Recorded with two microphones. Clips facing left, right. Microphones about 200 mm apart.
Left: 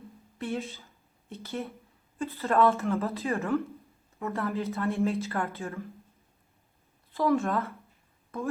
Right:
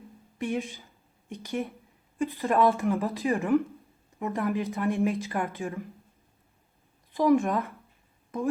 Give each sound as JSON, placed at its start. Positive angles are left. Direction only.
{"t": 0.3, "sound": "speech", "side_deg": -15}
{"t": 7.1, "sound": "speech", "side_deg": -15}